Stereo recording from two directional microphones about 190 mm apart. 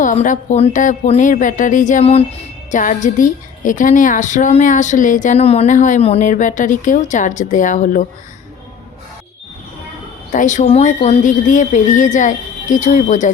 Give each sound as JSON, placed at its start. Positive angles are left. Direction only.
{"t": 0.0, "sound": "a woman's voice", "side_deg": 40}
{"t": 10.3, "sound": "a woman's voice", "side_deg": 40}